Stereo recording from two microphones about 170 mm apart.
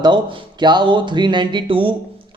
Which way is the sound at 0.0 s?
30° right (ahead or behind).